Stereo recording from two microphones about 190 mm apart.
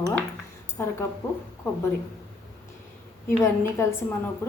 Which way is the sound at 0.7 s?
10° left (ahead or behind).